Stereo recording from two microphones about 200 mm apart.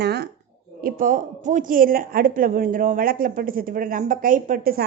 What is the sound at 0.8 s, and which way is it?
A woman's voice, 45° right (ahead or behind).